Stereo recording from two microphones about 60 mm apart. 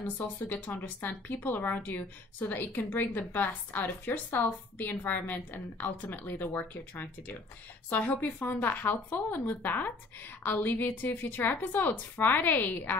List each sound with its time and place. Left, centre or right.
0.0 s a woman's voice: left